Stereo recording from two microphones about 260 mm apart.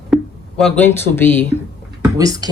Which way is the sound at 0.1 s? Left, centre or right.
Centre.